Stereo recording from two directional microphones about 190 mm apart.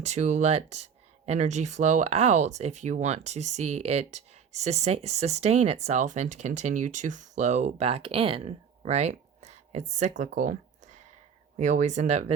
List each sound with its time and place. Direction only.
0.0 s speech: 35° right (ahead or behind)
11.5 s speech: 40° right (ahead or behind)